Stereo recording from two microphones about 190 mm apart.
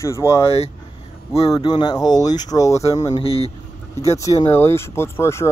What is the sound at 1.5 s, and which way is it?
Speech, 20° left (ahead or behind).